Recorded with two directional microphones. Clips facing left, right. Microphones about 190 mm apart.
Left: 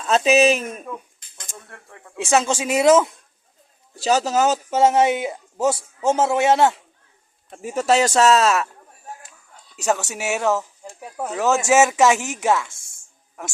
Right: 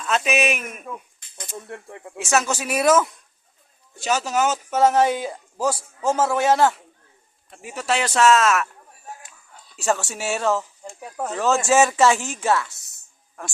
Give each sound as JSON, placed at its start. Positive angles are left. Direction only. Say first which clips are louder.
{"t": 0.0, "sound": "speech", "louder": "left 6 dB", "side_deg": 30}
{"t": 1.7, "sound": "speech", "louder": "right 8 dB", "side_deg": -25}
{"t": 2.2, "sound": "speech", "louder": "left 3 dB", "side_deg": 30}
{"t": 3.9, "sound": "speech", "louder": "left 4 dB", "side_deg": 35}
{"t": 7.5, "sound": "a man's voice", "louder": "left 6 dB", "side_deg": 45}
{"t": 9.7, "sound": "speech", "louder": "left 1 dB", "side_deg": 20}